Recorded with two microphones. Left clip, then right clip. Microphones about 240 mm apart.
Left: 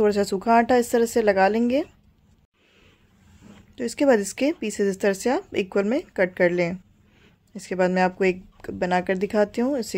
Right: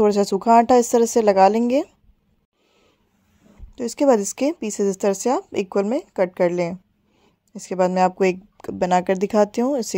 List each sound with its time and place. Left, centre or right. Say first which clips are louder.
0.0 s speech: right 3 dB; right
3.7 s speech: right 2 dB; right